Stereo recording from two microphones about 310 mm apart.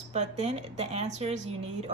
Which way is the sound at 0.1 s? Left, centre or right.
Right.